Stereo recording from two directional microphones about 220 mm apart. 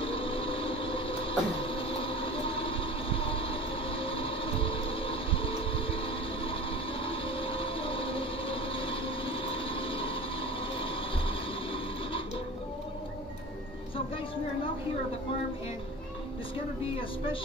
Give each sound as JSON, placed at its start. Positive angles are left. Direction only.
{"t": 0.0, "sound": "vehicle", "side_deg": 25}